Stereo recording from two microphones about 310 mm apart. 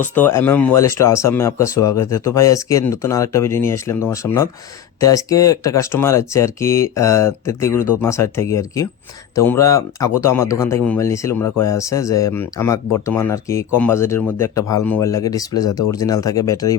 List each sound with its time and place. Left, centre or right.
0.0 s speech: centre
11.4 s speech: left
11.7 s speech: centre